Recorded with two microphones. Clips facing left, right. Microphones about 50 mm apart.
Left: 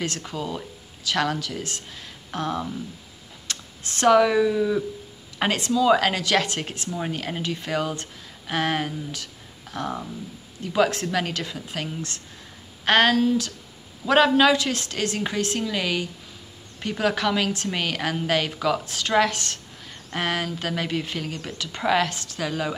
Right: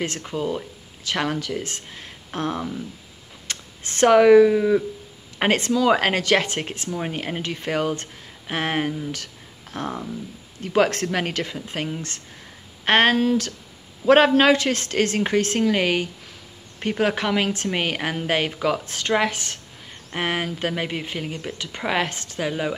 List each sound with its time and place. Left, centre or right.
0.0 s a woman's voice: right
9.1 s a sound: right
10.6 s a woman's voice: right
13.2 s speech: right
14.0 s a woman's voice: right